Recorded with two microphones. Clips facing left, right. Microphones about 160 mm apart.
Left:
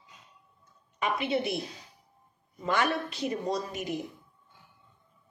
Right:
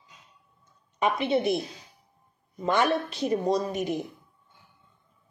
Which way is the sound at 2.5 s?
30° right (ahead or behind).